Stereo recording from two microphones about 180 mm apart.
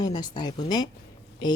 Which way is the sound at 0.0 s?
25° left (ahead or behind).